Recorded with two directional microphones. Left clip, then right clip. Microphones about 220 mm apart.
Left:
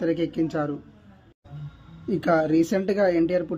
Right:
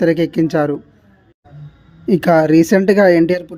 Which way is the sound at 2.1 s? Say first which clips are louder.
Right 10 dB; 35° right (ahead or behind).